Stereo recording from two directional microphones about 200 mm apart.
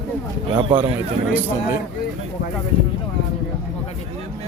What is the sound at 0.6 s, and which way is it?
Speech, 25° right (ahead or behind).